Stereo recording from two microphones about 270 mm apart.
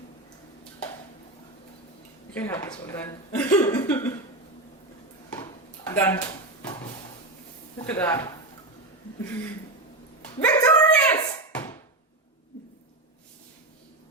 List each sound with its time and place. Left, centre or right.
2.3 s speech: centre
5.9 s speech: centre
7.9 s speech: centre
10.4 s a sound: centre